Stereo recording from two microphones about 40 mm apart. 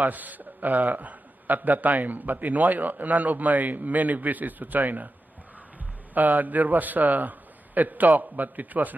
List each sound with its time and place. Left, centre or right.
0.0 s a man's voice: right
6.1 s a man's voice: right